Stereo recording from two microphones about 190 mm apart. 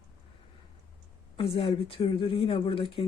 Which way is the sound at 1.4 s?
30° left (ahead or behind).